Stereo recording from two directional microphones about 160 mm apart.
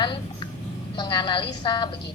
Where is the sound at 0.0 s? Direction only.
30° left (ahead or behind).